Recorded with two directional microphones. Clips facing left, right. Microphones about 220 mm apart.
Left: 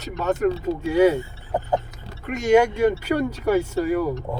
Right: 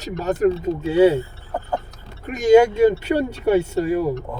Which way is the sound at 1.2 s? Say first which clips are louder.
Left 1 dB; 15° left (ahead or behind).